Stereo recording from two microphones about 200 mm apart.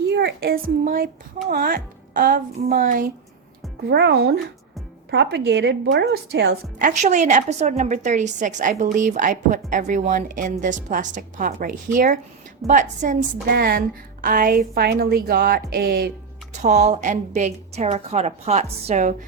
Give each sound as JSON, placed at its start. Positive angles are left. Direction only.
{"t": 0.1, "sound": "a child's voice", "side_deg": -55}
{"t": 3.8, "sound": "a woman's voice", "side_deg": -55}
{"t": 16.5, "sound": "a woman's voice", "side_deg": -35}